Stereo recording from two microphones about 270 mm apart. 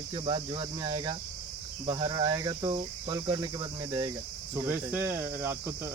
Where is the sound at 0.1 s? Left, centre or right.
Centre.